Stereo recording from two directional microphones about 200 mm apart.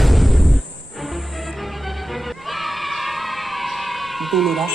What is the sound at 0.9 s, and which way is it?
Music, centre (ahead or behind).